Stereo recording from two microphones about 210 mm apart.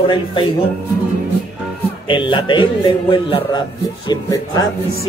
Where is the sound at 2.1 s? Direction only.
20° left (ahead or behind).